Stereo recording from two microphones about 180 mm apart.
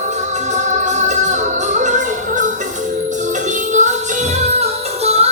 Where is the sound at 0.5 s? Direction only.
40° right (ahead or behind).